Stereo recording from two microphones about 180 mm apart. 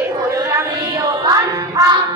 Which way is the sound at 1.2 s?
20° right (ahead or behind).